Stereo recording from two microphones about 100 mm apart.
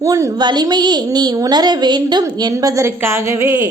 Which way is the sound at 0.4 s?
45° right (ahead or behind).